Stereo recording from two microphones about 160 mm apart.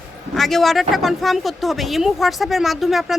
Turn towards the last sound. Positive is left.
turn(degrees=0)  # may be behind; listen again after turning